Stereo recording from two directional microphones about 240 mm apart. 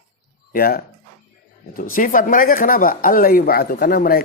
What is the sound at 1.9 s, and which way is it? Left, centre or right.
Speech, left.